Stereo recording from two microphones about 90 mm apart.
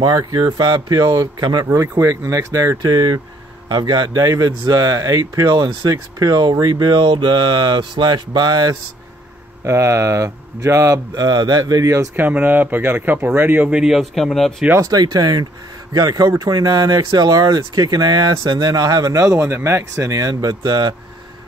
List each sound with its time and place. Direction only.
0.0 s speech: 45° right (ahead or behind)
1.7 s speech: 35° right (ahead or behind)
5.4 s speech: 55° right (ahead or behind)
9.7 s speech: 30° right (ahead or behind)
11.1 s speech: 50° right (ahead or behind)
12.2 s speech: 20° right (ahead or behind); by 14.5 s centre (ahead or behind)
14.9 s speech: 45° right (ahead or behind)